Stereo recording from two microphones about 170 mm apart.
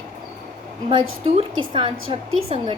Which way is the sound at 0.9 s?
30° right (ahead or behind).